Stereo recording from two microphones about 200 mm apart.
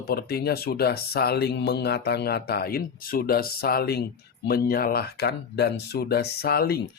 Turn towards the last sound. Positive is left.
turn(degrees=50)  # may be behind; listen again after turning